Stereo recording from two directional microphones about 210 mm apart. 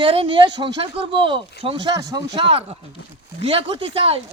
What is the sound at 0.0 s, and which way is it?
Speech, 25° right (ahead or behind).